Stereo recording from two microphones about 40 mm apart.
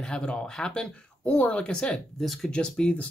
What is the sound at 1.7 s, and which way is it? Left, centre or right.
Speech, centre.